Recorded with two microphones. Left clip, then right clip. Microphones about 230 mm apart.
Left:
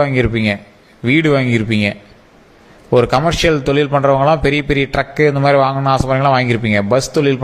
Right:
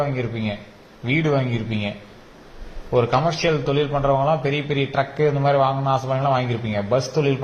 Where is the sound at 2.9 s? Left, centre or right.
Left.